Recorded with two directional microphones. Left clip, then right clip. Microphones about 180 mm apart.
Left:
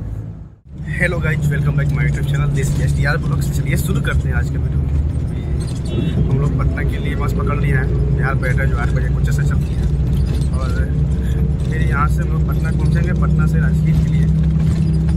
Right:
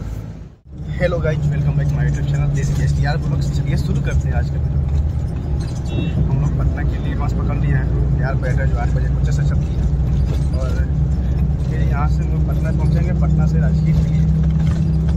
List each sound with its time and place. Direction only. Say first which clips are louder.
0.9 s speech: even; centre (ahead or behind)
7.4 s speech: left 4 dB; centre (ahead or behind)
12.6 s speech: left 1 dB; centre (ahead or behind)